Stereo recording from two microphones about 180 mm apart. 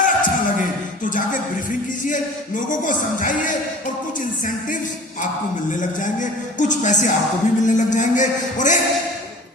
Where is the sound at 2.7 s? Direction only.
45° left (ahead or behind).